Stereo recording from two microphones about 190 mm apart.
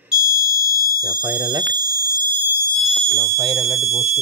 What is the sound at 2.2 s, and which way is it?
Fire alarm, 10° right (ahead or behind).